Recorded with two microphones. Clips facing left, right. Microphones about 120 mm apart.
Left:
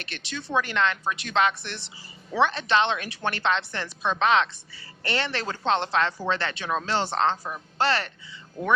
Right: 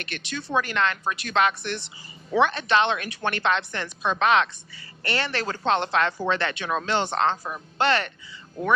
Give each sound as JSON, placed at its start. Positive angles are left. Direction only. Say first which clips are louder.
{"t": 0.0, "sound": "a woman's voice", "louder": "right 3 dB", "side_deg": 30}